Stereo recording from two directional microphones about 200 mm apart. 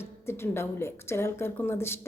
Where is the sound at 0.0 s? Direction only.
10° left (ahead or behind).